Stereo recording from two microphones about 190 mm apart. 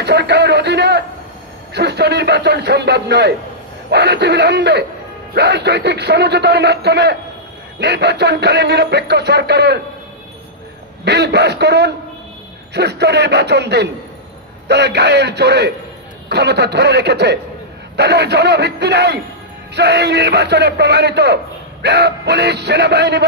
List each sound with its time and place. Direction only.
0.0 s speech: 60° right (ahead or behind)
11.1 s speech: 60° right (ahead or behind)